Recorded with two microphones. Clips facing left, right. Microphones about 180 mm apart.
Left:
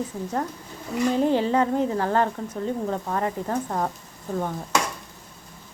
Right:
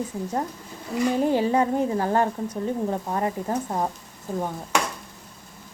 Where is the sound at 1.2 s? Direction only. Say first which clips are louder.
Even; 10° right (ahead or behind).